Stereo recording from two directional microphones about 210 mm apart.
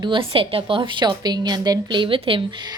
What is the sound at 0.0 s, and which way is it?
A woman's voice, 25° right (ahead or behind).